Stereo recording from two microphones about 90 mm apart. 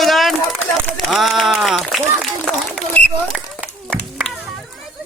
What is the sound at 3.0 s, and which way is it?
Speech, 20° left (ahead or behind).